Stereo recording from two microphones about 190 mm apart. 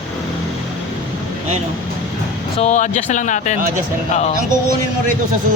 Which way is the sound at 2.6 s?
35° left (ahead or behind).